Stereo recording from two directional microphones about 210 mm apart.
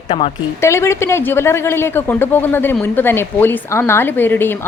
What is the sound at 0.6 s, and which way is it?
Speech, 15° left (ahead or behind).